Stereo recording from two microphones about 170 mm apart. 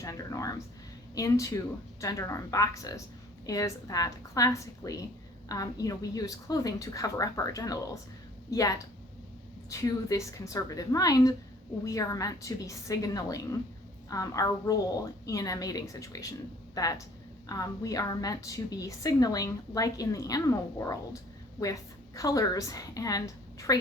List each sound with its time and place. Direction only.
0.0 s a woman's voice: 20° left (ahead or behind)